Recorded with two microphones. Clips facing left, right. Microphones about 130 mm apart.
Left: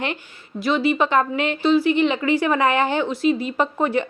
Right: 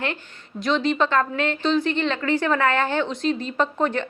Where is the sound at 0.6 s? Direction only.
5° left (ahead or behind).